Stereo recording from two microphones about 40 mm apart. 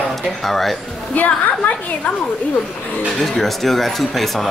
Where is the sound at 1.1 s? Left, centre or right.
Left.